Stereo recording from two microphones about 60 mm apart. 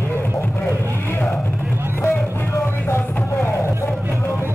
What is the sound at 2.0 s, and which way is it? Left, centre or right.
Music, left.